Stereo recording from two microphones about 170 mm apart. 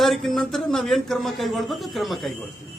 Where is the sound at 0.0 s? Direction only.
Centre (ahead or behind).